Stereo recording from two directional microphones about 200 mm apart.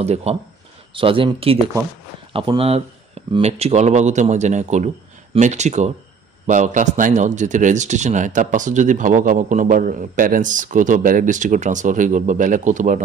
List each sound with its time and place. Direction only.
0.0 s a man's voice: 30° right (ahead or behind)